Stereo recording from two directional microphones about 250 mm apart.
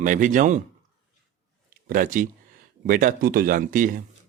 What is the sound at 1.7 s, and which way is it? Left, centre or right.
Speech, right.